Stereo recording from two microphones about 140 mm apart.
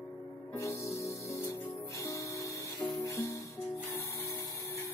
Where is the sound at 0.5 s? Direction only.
20° left (ahead or behind).